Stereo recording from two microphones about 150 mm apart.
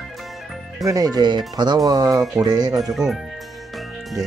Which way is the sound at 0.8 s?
20° right (ahead or behind).